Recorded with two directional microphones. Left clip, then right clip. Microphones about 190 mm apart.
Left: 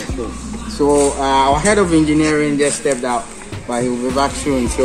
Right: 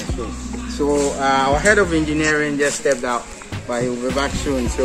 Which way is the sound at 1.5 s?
45° left (ahead or behind).